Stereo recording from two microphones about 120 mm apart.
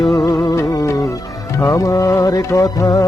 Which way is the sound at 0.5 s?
25° left (ahead or behind).